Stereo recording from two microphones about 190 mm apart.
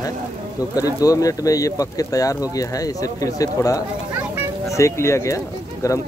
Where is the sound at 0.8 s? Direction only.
20° left (ahead or behind).